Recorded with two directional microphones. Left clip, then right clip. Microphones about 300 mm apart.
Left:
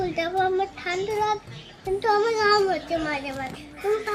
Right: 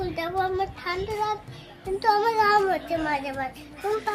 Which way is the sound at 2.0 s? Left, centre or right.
Centre.